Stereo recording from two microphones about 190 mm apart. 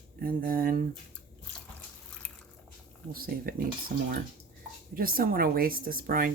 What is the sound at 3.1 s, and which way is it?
Speech, 50° right (ahead or behind).